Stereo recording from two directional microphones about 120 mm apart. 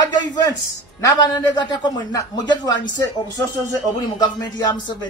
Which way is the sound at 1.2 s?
40° left (ahead or behind).